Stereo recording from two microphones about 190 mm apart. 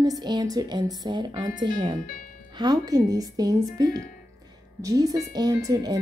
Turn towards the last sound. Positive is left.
turn(degrees=-20)  # may be behind; listen again after turning